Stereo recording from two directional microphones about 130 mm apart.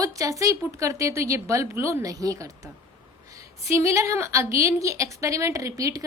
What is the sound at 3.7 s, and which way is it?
Speech, 25° right (ahead or behind).